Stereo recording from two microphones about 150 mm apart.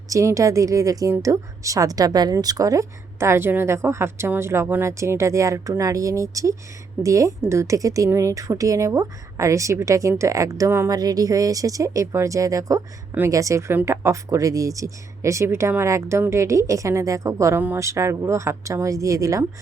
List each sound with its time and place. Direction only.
0.1 s speech: 20° right (ahead or behind)